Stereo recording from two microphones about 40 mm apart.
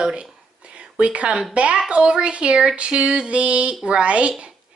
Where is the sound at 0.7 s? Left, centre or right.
Right.